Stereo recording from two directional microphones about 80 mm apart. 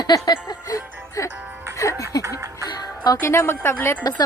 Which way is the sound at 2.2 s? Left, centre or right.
Right.